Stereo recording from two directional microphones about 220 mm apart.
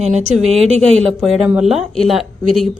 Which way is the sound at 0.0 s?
30° right (ahead or behind).